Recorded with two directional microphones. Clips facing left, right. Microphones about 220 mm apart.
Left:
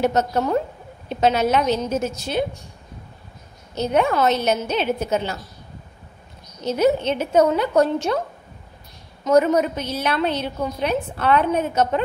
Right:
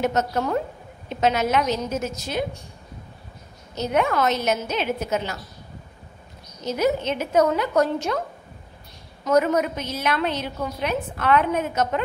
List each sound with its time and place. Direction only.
0.0 s a woman's voice: 30° left (ahead or behind)
3.7 s a woman's voice: 30° left (ahead or behind)
6.6 s a woman's voice: 30° left (ahead or behind)
9.2 s a woman's voice: 30° left (ahead or behind)